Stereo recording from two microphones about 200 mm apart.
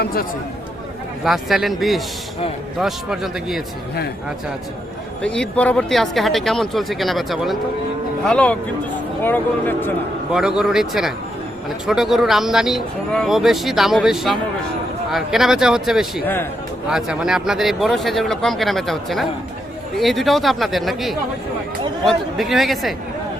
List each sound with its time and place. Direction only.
0.0 s speech: 50° left (ahead or behind)
1.2 s speech: centre (ahead or behind)
5.2 s speech: 5° left (ahead or behind)
10.6 s speech: centre (ahead or behind)
16.2 s speech: 10° left (ahead or behind)
16.8 s speech: 5° right (ahead or behind)